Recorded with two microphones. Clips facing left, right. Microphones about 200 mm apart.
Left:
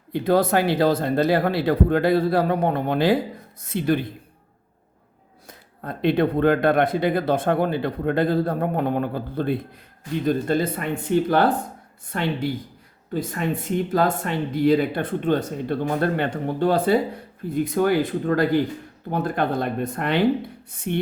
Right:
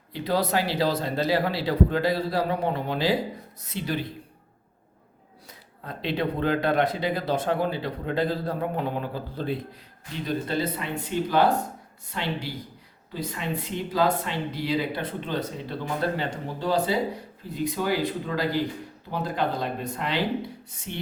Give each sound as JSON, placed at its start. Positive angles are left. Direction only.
{"t": 0.1, "sound": "speech", "side_deg": 50}
{"t": 5.8, "sound": "speech", "side_deg": 55}